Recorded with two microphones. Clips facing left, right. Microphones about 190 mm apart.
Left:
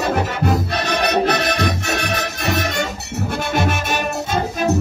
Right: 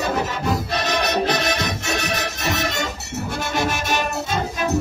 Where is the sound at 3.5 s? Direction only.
50° left (ahead or behind).